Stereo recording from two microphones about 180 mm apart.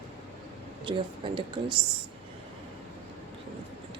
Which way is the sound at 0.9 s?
25° right (ahead or behind).